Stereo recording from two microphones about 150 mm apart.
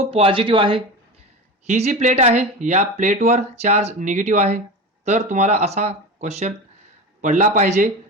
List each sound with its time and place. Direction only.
0.0 s speech: 40° right (ahead or behind)
1.6 s a man's voice: 50° right (ahead or behind)